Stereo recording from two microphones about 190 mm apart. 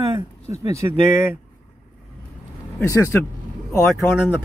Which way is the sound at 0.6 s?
15° right (ahead or behind).